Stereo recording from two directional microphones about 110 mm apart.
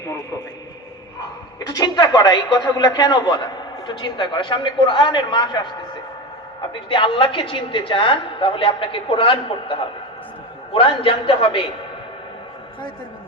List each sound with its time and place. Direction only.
0.0 s a sound: 30° left (ahead or behind)
1.5 s a man's voice: 35° left (ahead or behind)
6.9 s a woman's voice: 50° left (ahead or behind)